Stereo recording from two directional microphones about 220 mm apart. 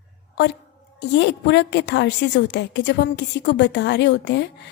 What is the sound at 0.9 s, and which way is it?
A woman's voice, 50° left (ahead or behind).